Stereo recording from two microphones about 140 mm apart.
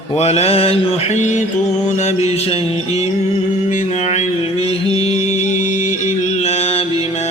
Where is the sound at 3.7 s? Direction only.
60° left (ahead or behind).